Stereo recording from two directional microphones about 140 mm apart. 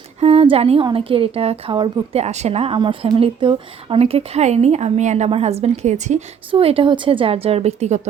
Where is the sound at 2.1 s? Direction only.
50° right (ahead or behind).